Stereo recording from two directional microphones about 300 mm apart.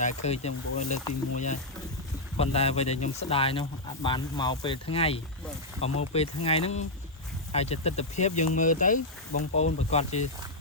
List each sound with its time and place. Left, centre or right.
0.0 s speech: left